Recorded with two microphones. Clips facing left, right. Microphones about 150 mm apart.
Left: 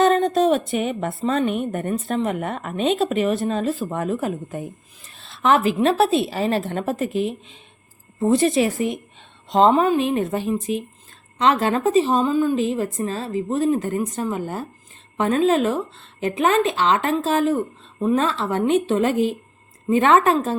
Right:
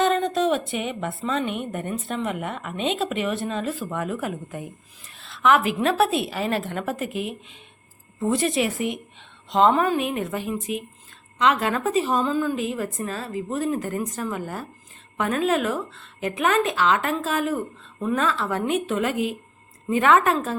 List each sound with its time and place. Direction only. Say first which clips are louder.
0.0 s a woman's voice: left 4 dB; 40° left (ahead or behind)
9.7 s a woman's voice: left 4 dB; 20° left (ahead or behind)
12.2 s a woman's voice: left 5 dB; 15° left (ahead or behind)